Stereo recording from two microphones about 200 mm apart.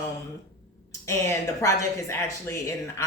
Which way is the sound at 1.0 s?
15° left (ahead or behind).